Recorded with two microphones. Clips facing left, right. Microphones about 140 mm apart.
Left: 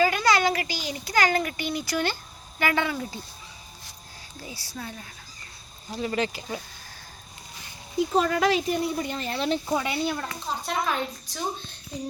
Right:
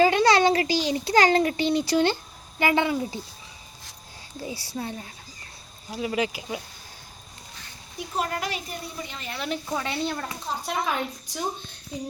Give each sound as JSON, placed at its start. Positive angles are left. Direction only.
{"t": 0.0, "sound": "a child's voice", "side_deg": -30}
{"t": 4.4, "sound": "speech", "side_deg": -25}
{"t": 5.9, "sound": "speech", "side_deg": -5}
{"t": 8.1, "sound": "speech", "side_deg": 90}
{"t": 9.0, "sound": "speech", "side_deg": 40}
{"t": 9.7, "sound": "speech", "side_deg": 10}
{"t": 10.7, "sound": "a woman's voice", "side_deg": -10}